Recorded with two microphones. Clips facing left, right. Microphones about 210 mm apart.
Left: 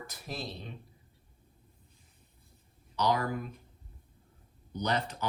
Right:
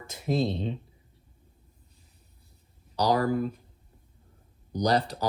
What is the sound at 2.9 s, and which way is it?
Speech, 35° right (ahead or behind).